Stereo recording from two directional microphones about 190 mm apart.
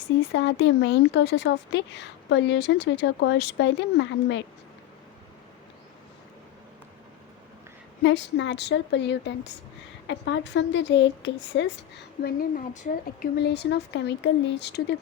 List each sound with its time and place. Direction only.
0.3 s speech: 65° left (ahead or behind)
8.0 s speech: 70° left (ahead or behind); by 12.9 s 45° left (ahead or behind)
13.3 s speech: 60° left (ahead or behind)